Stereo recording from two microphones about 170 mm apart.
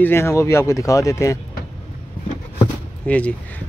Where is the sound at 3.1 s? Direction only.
10° left (ahead or behind).